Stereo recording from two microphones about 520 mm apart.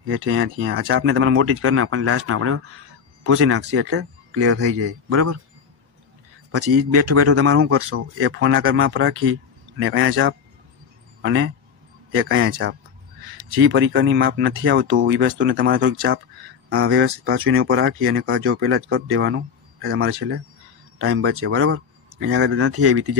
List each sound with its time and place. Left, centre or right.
0.0 s speech: right
6.5 s speech: right